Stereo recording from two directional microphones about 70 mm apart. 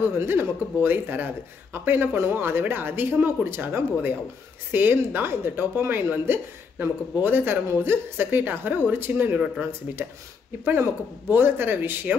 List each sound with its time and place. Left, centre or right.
0.2 s a woman's voice: right